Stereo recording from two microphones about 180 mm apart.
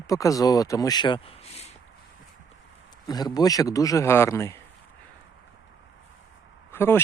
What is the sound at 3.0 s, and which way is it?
Speech, 20° left (ahead or behind).